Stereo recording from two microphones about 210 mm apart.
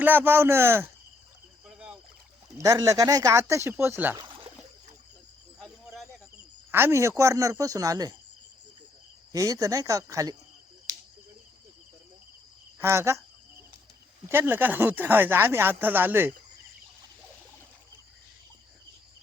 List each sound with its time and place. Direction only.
0.0 s speech: 10° right (ahead or behind)
1.6 s rowboat: 5° right (ahead or behind)
2.6 s speech: 15° right (ahead or behind)
6.7 s speech: 10° right (ahead or behind)
9.3 s speech: 15° right (ahead or behind)
12.8 s speech: 15° right (ahead or behind)
14.3 s speech: 10° right (ahead or behind)